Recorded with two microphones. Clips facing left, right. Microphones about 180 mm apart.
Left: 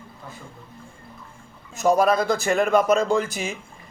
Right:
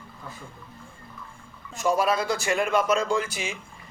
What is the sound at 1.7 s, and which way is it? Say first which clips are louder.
A man's voice: left 5 dB; 45° left (ahead or behind).